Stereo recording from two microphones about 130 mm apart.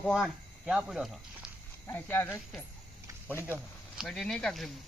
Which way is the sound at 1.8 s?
15° left (ahead or behind).